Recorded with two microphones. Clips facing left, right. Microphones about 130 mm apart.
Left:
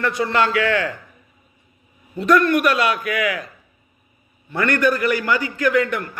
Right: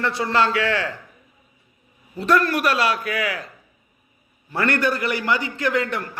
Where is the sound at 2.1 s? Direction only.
30° right (ahead or behind).